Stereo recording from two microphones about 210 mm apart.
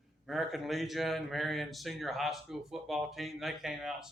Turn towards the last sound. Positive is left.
turn(degrees=0)  # may be behind; listen again after turning